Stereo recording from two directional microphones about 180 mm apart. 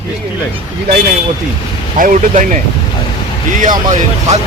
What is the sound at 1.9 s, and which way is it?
Speech, 45° right (ahead or behind).